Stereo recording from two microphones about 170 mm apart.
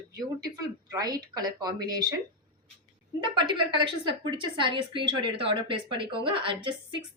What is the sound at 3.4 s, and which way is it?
Speech, 25° right (ahead or behind).